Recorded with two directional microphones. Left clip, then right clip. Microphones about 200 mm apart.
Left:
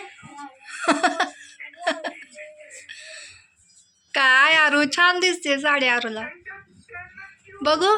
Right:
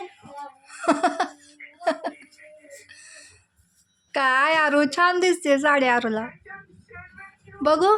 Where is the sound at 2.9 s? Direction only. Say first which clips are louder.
Left 7 dB; 25° right (ahead or behind).